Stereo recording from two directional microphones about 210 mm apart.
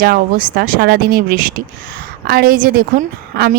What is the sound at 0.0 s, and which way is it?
Speech, 45° right (ahead or behind).